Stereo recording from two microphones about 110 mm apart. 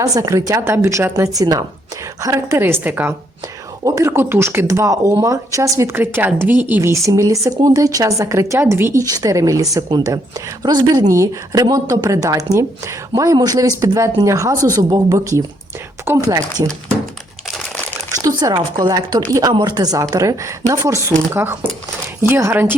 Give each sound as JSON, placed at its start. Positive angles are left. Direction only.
{"t": 0.0, "sound": "speech", "side_deg": -30}
{"t": 18.2, "sound": "speech", "side_deg": -30}